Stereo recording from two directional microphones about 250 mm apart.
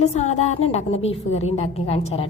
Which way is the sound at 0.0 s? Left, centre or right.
Left.